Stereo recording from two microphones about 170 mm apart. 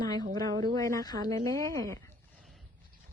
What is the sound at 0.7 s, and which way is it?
A woman's voice, 20° left (ahead or behind).